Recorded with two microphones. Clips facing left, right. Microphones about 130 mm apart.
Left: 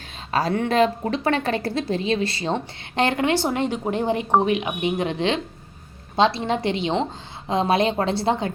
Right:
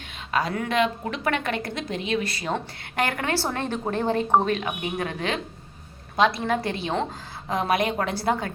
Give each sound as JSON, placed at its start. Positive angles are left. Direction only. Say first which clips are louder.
{"t": 0.3, "sound": "a woman's voice", "louder": "left 4 dB", "side_deg": 35}